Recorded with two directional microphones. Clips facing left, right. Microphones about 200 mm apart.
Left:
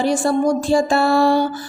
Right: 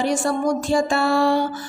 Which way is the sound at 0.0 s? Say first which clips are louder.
Left 4 dB; 30° left (ahead or behind).